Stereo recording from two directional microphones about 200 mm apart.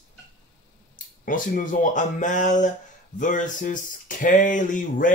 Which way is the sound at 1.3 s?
40° left (ahead or behind).